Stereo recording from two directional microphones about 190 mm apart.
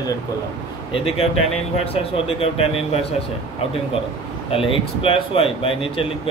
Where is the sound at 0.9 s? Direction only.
30° left (ahead or behind).